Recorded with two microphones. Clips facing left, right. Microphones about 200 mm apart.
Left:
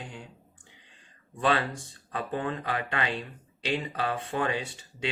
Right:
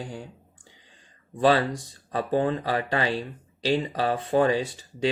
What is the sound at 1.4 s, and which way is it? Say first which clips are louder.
Speech: right 6 dB; 35° right (ahead or behind).